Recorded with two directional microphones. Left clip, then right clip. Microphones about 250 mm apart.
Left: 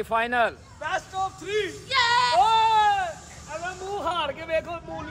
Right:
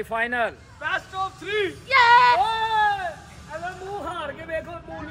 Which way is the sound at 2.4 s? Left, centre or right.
Centre.